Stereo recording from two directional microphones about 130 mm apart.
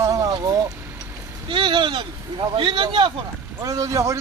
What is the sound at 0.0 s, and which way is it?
Vehicle, 25° right (ahead or behind).